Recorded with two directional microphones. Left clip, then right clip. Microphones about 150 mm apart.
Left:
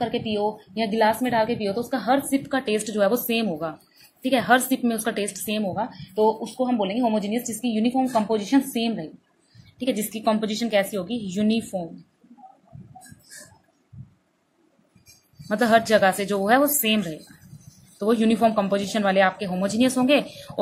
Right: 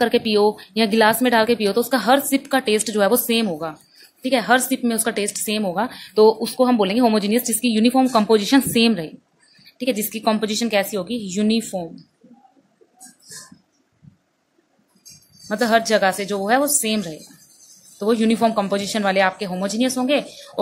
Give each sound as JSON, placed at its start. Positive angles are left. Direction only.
{"t": 0.2, "sound": "speech", "side_deg": -40}
{"t": 6.1, "sound": "a woman's voice", "side_deg": -45}
{"t": 9.8, "sound": "speech", "side_deg": -15}
{"t": 15.4, "sound": "a woman's voice", "side_deg": 0}